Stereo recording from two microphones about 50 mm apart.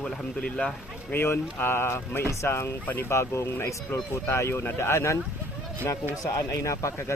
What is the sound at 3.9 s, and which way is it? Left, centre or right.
Speech, left.